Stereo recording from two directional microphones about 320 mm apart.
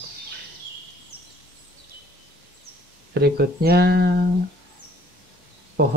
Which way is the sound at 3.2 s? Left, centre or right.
Right.